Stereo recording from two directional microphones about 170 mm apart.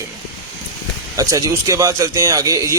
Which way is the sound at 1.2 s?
20° right (ahead or behind).